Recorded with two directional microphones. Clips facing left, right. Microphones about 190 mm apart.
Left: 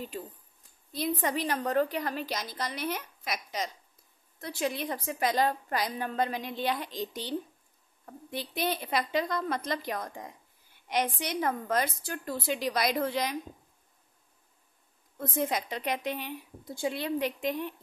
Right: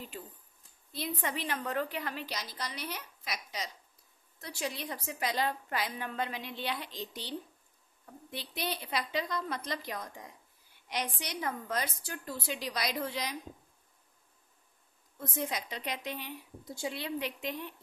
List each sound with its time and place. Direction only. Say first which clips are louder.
0.9 s a woman's voice: left 6 dB; 45° left (ahead or behind)
15.1 s a woman's voice: left 6 dB; 55° left (ahead or behind)